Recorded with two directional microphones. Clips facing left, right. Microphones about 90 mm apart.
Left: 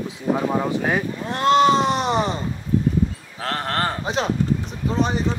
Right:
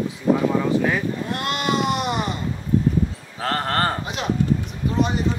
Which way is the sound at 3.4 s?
Centre (ahead or behind).